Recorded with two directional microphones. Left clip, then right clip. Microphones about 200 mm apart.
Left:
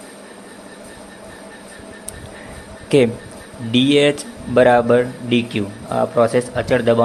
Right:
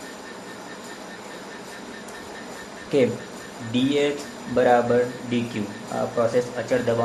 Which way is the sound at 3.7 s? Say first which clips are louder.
Left 8 dB; 45° left (ahead or behind).